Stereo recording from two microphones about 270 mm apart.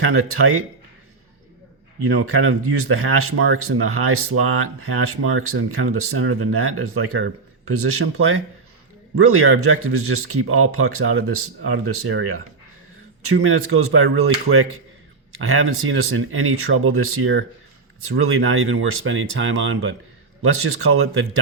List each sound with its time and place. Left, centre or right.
0.0 s speech: right
2.0 s speech: right
9.1 s speech: right